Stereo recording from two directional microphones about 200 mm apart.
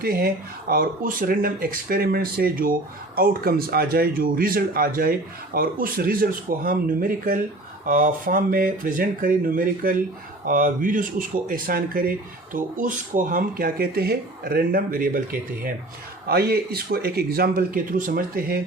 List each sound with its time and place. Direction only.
0.0 s speech: 50° right (ahead or behind)